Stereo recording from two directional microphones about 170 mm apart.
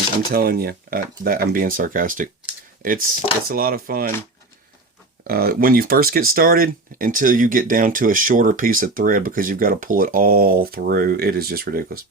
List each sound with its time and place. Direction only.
0.3 s speech: 60° right (ahead or behind)
5.3 s speech: 60° right (ahead or behind)